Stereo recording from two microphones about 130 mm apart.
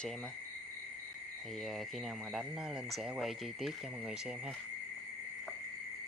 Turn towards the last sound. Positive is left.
turn(degrees=0)  # may be behind; listen again after turning